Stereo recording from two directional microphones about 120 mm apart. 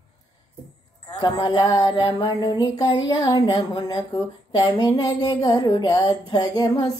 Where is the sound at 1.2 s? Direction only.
35° left (ahead or behind).